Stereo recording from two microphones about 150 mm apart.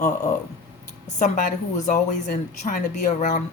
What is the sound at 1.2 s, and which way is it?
A woman's voice, 60° left (ahead or behind).